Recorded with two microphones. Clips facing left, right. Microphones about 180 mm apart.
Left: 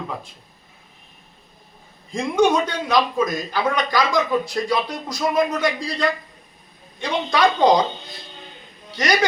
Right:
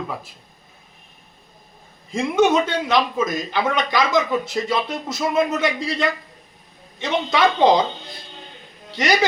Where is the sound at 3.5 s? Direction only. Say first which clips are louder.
Even; 25° right (ahead or behind).